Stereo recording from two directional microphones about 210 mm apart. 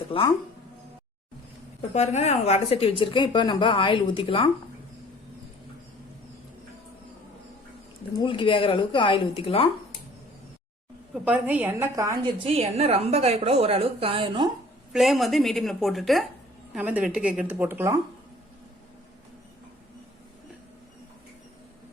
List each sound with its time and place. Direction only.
0.1 s a woman's voice: 25° left (ahead or behind)
1.9 s a woman's voice: 35° left (ahead or behind)
8.1 s a woman's voice: 25° left (ahead or behind)
11.1 s a woman's voice: 5° right (ahead or behind)
12.4 s a woman's voice: 30° right (ahead or behind)
14.9 s a woman's voice: centre (ahead or behind)